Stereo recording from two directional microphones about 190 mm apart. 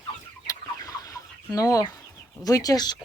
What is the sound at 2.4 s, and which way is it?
Speech, 20° left (ahead or behind).